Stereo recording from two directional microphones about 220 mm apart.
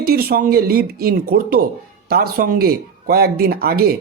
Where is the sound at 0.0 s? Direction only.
45° right (ahead or behind).